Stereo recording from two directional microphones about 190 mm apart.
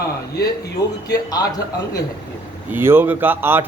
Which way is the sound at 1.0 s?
20° left (ahead or behind).